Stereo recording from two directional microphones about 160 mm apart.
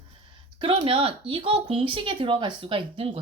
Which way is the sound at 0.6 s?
35° right (ahead or behind).